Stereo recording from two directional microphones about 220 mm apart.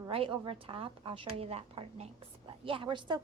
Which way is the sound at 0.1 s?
25° right (ahead or behind).